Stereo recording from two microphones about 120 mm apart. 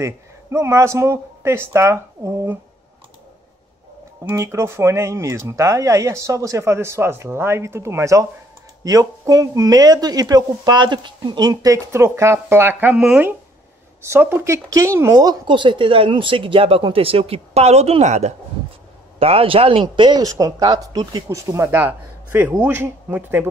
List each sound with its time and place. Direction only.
0.0 s speech: 25° right (ahead or behind)
4.2 s speech: 20° right (ahead or behind); by 18.3 s 70° right (ahead or behind)
19.1 s speech: 55° right (ahead or behind); by 21.4 s 35° right (ahead or behind)
21.5 s speech: 20° right (ahead or behind)